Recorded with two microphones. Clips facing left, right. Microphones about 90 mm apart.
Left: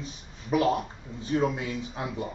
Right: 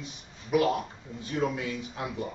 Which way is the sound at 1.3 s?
30° left (ahead or behind).